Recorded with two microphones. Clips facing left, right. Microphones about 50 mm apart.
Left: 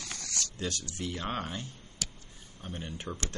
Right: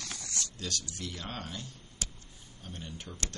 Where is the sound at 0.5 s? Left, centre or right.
Left.